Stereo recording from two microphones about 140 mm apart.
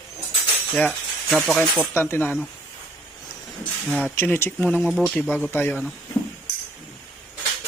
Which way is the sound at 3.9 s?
10° left (ahead or behind).